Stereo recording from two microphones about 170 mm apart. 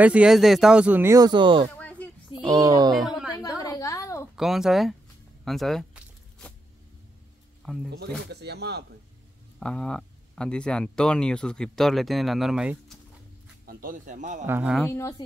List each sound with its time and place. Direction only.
0.0 s speech: 5° right (ahead or behind); by 1.7 s 30° right (ahead or behind)
1.8 s a sound: 10° left (ahead or behind)
2.4 s speech: 20° right (ahead or behind)
3.3 s a sound: 20° left (ahead or behind)
4.4 s speech: centre (ahead or behind)
5.4 s zipper: centre (ahead or behind)
7.6 s speech: 5° left (ahead or behind)
8.3 s speech: 75° right (ahead or behind)
9.6 s speech: 5° left (ahead or behind)
13.7 s speech: 55° right (ahead or behind)
14.4 s speech: 10° right (ahead or behind)
14.9 s speech: 15° left (ahead or behind)